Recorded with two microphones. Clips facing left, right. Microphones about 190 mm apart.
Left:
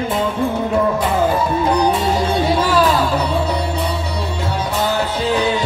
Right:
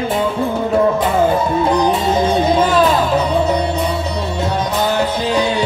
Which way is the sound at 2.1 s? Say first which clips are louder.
Right 3 dB; 20° right (ahead or behind).